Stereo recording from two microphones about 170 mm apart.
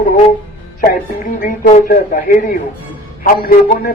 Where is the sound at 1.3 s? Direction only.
55° left (ahead or behind).